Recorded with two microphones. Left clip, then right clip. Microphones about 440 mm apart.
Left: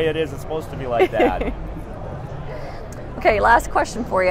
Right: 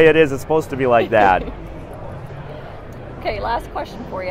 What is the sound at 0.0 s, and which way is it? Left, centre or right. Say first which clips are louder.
A man's voice: right 9 dB; right.